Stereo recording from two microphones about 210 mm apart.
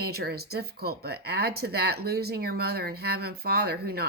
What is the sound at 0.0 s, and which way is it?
Speech, 50° right (ahead or behind).